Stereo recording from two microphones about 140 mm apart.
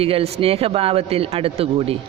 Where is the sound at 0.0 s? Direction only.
45° right (ahead or behind).